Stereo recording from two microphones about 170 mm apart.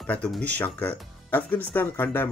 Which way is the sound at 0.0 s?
5° left (ahead or behind).